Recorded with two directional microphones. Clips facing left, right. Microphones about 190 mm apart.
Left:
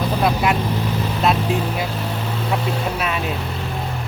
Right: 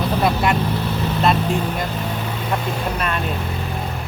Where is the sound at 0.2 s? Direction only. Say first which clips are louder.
Even; centre (ahead or behind).